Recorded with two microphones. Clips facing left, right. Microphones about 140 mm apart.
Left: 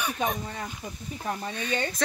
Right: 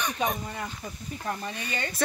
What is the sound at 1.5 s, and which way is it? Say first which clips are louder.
Speech: left 5 dB; 10° right (ahead or behind).